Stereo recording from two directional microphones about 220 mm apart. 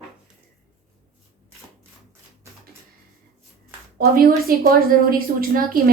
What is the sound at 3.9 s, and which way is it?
A woman's voice, 40° right (ahead or behind).